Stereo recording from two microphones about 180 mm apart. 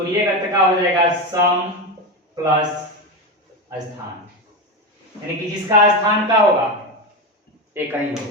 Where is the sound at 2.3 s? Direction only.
20° right (ahead or behind).